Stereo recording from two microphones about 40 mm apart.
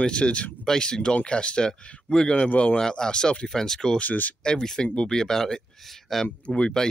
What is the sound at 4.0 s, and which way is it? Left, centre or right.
Speech, left.